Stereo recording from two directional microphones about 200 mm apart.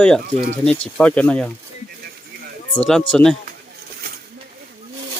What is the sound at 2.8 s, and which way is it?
Speech, 5° left (ahead or behind).